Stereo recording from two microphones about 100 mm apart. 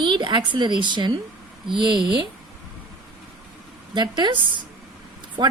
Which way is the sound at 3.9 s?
50° right (ahead or behind).